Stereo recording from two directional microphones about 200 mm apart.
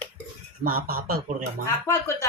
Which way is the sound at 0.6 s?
45° right (ahead or behind).